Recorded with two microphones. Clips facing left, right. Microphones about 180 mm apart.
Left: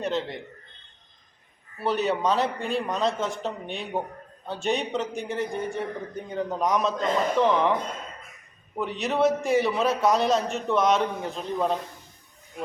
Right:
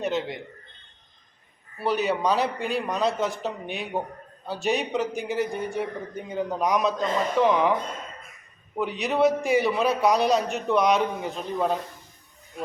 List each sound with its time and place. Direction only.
0.0 s a man's voice: centre (ahead or behind)
1.8 s a man's voice: centre (ahead or behind)
8.7 s a man's voice: centre (ahead or behind)